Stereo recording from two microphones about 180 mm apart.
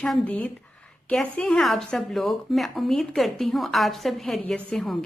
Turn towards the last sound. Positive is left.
turn(degrees=0)  # may be behind; listen again after turning